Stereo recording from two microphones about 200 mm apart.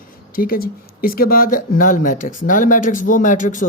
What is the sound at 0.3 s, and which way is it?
Speech, 45° left (ahead or behind).